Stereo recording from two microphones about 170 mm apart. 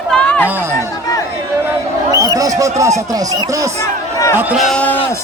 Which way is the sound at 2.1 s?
20° right (ahead or behind).